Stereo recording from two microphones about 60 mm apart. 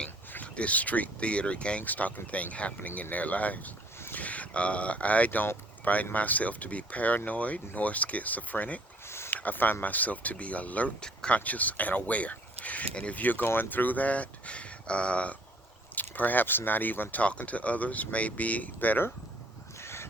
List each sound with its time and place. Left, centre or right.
0.4 s speech: centre
9.0 s a sound: left
9.3 s speech: left
11.0 s speech: centre
11.3 s speech: left
13.1 s speech: left
19.8 s crow: left